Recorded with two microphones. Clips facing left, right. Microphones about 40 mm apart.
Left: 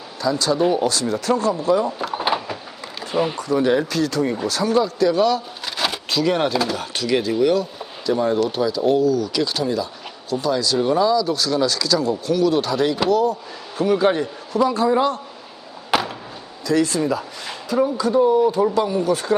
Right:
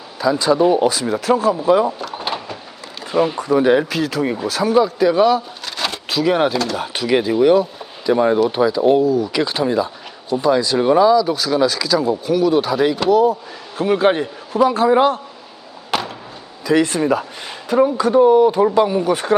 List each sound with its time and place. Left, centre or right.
0.2 s a man's voice: centre
2.0 s drawer open or close: centre
3.0 s a sound: centre
3.3 s speech: centre
3.8 s a man's voice: centre
5.6 s a sound: centre
6.7 s speech: centre
13.8 s speech: right
15.9 s a sound: centre
16.8 s speech: right
18.5 s speech: right
18.8 s speech: right